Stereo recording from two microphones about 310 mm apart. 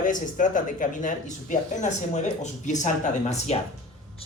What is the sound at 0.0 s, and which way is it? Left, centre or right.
Speech, left.